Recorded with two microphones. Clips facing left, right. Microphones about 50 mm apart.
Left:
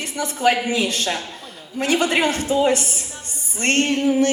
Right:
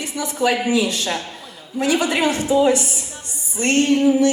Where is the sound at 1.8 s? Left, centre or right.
Left.